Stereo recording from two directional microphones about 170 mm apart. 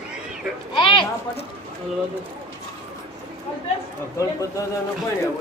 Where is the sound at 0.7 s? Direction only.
30° left (ahead or behind).